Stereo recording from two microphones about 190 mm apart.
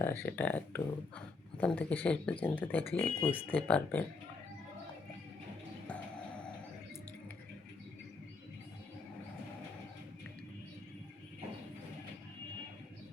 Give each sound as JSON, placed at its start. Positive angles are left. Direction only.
{"t": 0.0, "sound": "speech", "side_deg": 10}